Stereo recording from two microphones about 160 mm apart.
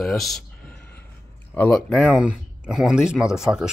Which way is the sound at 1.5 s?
10° left (ahead or behind).